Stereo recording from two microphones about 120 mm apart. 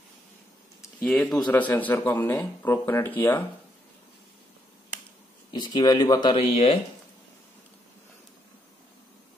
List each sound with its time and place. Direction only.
1.0 s speech: 10° left (ahead or behind)
5.5 s speech: 40° left (ahead or behind)
6.3 s speech: 55° left (ahead or behind)